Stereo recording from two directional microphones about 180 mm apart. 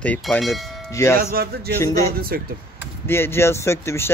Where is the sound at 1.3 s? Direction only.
60° right (ahead or behind).